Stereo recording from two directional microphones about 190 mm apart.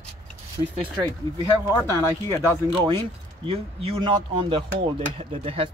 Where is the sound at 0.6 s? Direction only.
25° right (ahead or behind).